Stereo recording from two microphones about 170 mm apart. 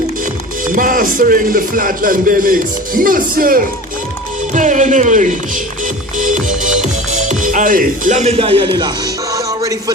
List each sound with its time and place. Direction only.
0.7 s speech: 55° right (ahead or behind); by 8.9 s 30° right (ahead or behind)
9.3 s music: 20° right (ahead or behind)